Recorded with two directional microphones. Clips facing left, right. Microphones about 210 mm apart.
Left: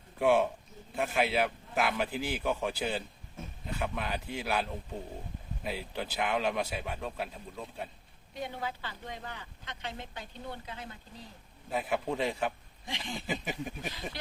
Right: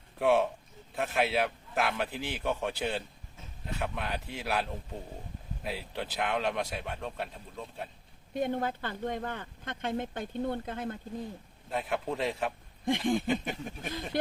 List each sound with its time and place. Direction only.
0.2 s a man's voice: centre (ahead or behind)
8.3 s speech: 50° right (ahead or behind)
11.7 s a man's voice: centre (ahead or behind)
12.9 s speech: 50° right (ahead or behind)
13.2 s a man's voice: 5° left (ahead or behind)